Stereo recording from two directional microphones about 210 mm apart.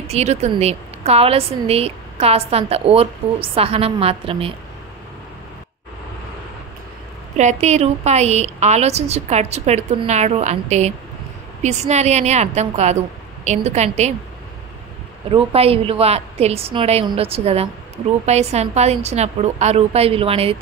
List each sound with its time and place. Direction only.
0.1 s a woman's voice: 30° right (ahead or behind)
7.3 s a woman's voice: 35° right (ahead or behind)
15.3 s a woman's voice: 30° right (ahead or behind)